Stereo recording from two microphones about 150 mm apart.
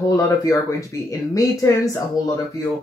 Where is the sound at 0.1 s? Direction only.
20° left (ahead or behind).